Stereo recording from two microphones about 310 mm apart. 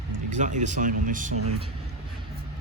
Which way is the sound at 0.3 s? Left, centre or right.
Right.